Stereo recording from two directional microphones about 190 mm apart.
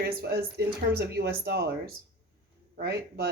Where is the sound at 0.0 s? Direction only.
55° right (ahead or behind).